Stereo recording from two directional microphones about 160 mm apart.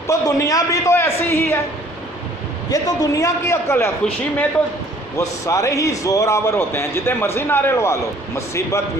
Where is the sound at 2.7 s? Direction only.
20° left (ahead or behind).